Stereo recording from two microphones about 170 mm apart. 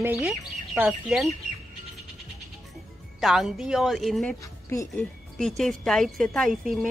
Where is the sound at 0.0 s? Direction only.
10° right (ahead or behind).